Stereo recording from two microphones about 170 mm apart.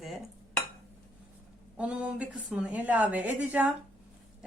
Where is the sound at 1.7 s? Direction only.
5° right (ahead or behind).